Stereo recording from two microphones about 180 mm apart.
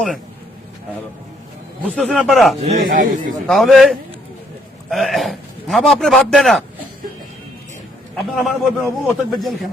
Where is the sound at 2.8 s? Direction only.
55° right (ahead or behind).